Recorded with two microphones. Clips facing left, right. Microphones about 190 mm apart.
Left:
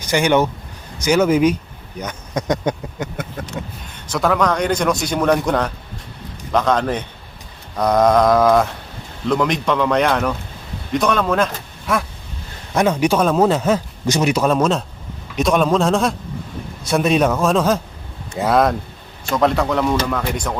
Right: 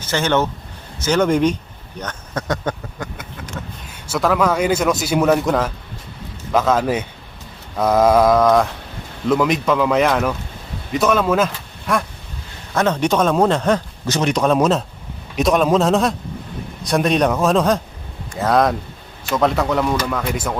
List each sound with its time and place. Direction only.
0.0 s speech: 15° left (ahead or behind)
4.0 s speech: 5° right (ahead or behind)